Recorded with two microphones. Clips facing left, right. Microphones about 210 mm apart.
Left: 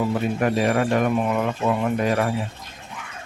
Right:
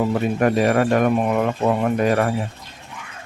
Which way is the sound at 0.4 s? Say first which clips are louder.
Right 4 dB; 50° right (ahead or behind).